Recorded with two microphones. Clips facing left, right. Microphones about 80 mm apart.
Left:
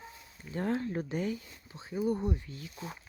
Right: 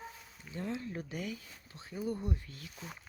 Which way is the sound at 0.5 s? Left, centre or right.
Left.